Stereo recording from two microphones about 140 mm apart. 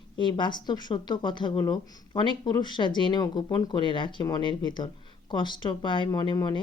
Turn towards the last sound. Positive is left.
turn(degrees=35)  # may be behind; listen again after turning